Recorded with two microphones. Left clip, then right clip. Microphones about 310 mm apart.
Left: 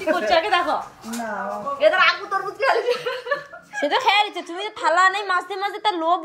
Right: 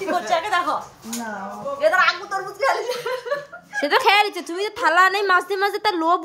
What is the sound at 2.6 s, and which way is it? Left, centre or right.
Chuckle, centre.